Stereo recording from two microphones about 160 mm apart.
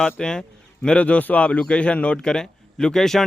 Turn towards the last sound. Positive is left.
turn(degrees=5)  # may be behind; listen again after turning